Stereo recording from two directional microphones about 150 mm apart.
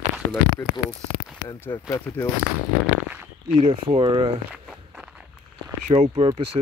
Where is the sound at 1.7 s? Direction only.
15° left (ahead or behind).